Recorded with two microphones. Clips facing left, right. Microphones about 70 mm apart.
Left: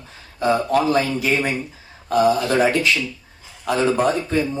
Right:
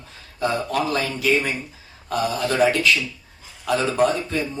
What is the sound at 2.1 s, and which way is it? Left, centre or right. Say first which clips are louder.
Speech: left 6 dB; left.